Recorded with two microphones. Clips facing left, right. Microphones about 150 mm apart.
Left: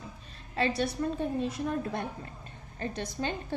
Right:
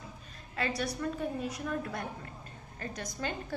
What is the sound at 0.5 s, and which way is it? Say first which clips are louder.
A woman's voice: left 5 dB; 30° left (ahead or behind).